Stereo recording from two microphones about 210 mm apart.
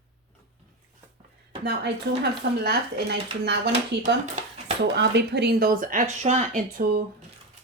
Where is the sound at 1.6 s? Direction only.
55° right (ahead or behind).